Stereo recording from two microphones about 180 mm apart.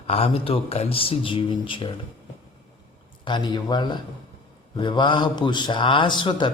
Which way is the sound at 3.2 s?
25° left (ahead or behind).